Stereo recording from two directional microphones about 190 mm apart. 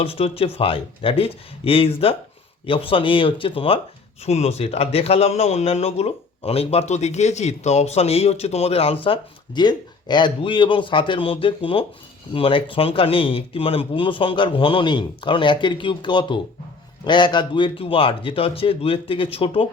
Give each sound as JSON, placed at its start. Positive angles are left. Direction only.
{"t": 0.0, "sound": "a man's voice", "side_deg": 30}